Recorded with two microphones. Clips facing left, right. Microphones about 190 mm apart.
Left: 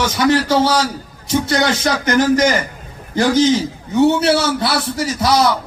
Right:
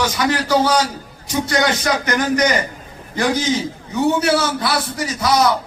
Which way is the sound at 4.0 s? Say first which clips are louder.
Left 3 dB; 25° left (ahead or behind).